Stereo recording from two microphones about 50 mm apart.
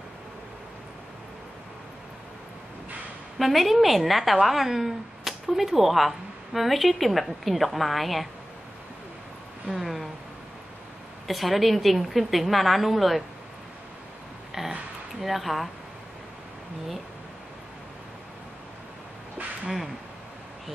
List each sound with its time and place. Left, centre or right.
3.3 s a woman's voice: centre
9.8 s a woman's voice: centre
11.2 s a woman's voice: centre
14.5 s a sound: centre
15.1 s a woman's voice: centre